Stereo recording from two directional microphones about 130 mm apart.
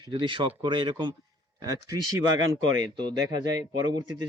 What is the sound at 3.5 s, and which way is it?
Speech, 30° right (ahead or behind).